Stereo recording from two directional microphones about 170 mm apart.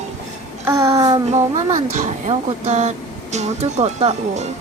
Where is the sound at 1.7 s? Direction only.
45° right (ahead or behind).